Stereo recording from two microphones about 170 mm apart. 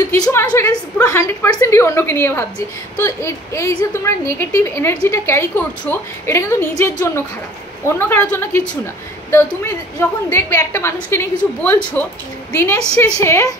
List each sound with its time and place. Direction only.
0.1 s a woman's voice: 15° left (ahead or behind)